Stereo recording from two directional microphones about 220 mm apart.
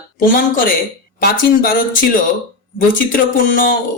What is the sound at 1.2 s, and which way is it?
Speech, 40° left (ahead or behind).